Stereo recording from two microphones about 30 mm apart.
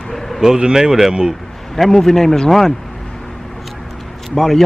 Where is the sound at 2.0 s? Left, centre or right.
Centre.